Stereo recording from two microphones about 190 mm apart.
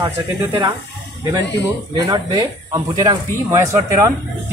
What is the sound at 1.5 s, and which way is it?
Speech, 20° right (ahead or behind).